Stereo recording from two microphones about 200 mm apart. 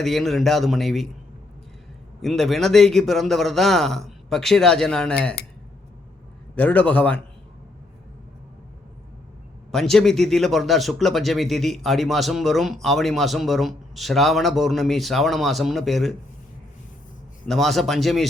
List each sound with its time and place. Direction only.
0.0 s speech: centre (ahead or behind)
2.2 s speech: centre (ahead or behind)
6.6 s a man's voice: 5° left (ahead or behind)
9.7 s speech: centre (ahead or behind)
17.5 s speech: centre (ahead or behind)